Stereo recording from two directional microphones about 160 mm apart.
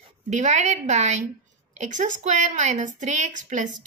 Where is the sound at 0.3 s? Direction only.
45° right (ahead or behind).